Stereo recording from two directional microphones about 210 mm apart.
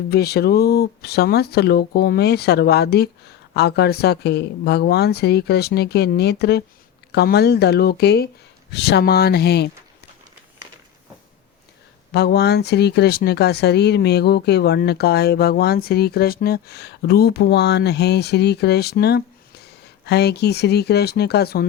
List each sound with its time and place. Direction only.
0.1 s speech: 50° left (ahead or behind)
12.1 s speech: 50° left (ahead or behind)